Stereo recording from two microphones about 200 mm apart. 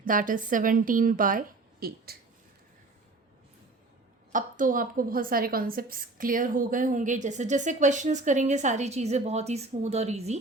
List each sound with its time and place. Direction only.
0.0 s a woman's voice: 45° right (ahead or behind)
4.3 s a woman's voice: 40° right (ahead or behind)